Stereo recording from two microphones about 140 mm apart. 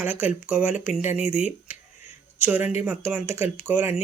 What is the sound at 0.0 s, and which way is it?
Speech, 10° right (ahead or behind).